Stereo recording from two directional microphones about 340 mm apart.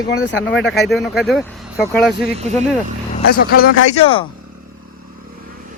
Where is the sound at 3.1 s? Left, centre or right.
Left.